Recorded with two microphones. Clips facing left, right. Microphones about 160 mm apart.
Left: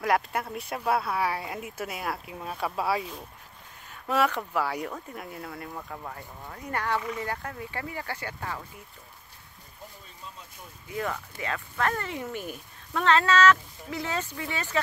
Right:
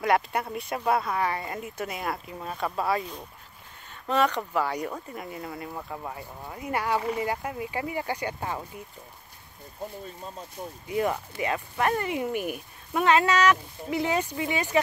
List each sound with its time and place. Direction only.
0.0 s speech: centre (ahead or behind); by 8.6 s 20° right (ahead or behind)
10.2 s speech: 45° right (ahead or behind)
10.9 s speech: 20° right (ahead or behind)